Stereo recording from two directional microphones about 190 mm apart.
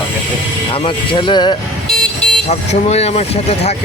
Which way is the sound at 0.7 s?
25° left (ahead or behind).